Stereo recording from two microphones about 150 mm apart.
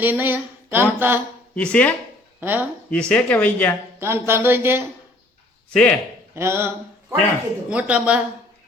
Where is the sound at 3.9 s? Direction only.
15° right (ahead or behind).